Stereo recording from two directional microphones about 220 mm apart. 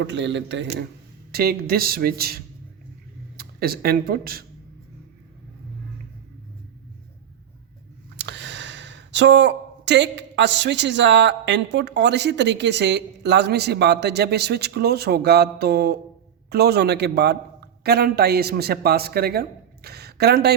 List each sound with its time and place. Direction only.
0.0 s a man's voice: 55° right (ahead or behind)
1.3 s speech: 45° right (ahead or behind)
8.1 s speech: 50° right (ahead or behind)